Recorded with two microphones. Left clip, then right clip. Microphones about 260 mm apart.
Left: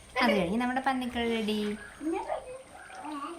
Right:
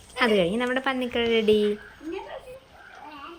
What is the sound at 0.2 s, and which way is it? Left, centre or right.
A woman's voice, centre.